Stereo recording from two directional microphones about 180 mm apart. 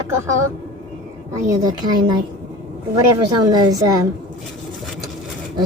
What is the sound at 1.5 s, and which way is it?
Speech, 20° right (ahead or behind).